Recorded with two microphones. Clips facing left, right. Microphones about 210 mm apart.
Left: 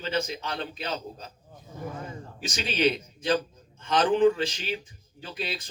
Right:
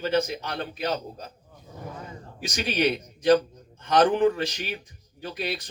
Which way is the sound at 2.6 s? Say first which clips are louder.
Even; 55° right (ahead or behind).